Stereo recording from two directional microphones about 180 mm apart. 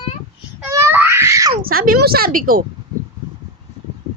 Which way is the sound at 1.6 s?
55° right (ahead or behind).